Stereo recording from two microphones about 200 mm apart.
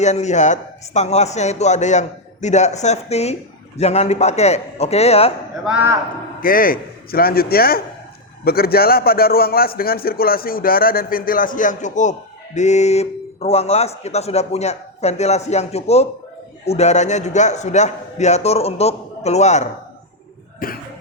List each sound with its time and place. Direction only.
0.0 s speech: 35° left (ahead or behind)
5.6 s a man's voice: 10° right (ahead or behind)
6.4 s a man's voice: 45° left (ahead or behind)
20.6 s a man's voice: 45° left (ahead or behind)